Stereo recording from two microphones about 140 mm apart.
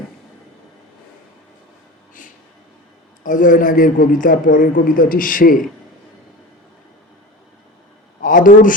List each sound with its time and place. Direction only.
3.2 s a man's voice: 70° left (ahead or behind)
8.2 s a man's voice: 75° left (ahead or behind)